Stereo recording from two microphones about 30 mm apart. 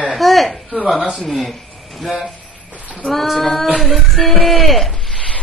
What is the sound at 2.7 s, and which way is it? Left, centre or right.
Speech, right.